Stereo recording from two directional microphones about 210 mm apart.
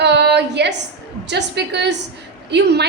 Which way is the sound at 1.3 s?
55° right (ahead or behind).